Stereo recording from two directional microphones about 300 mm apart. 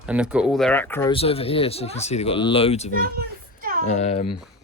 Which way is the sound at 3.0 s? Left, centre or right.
Right.